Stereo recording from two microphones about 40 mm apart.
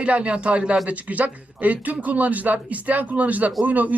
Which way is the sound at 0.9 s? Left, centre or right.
Right.